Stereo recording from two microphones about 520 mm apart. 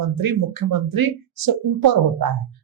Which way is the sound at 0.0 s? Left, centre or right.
Right.